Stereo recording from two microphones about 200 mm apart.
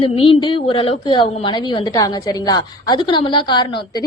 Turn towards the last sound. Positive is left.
turn(degrees=20)  # may be behind; listen again after turning